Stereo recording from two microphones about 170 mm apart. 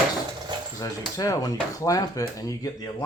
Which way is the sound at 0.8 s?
20° left (ahead or behind).